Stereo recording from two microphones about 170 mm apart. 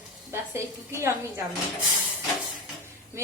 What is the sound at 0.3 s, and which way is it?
Speech, 15° right (ahead or behind).